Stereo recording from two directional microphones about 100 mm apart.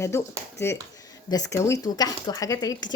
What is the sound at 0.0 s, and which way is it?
Speech, 30° left (ahead or behind).